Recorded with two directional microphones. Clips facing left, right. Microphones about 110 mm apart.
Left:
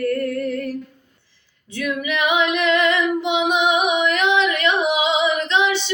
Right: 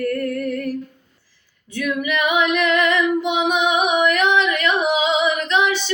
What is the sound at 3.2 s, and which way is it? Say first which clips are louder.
Child singing: even; 15° left (ahead or behind).